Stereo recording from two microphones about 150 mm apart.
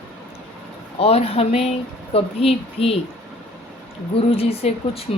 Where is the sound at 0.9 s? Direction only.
40° left (ahead or behind).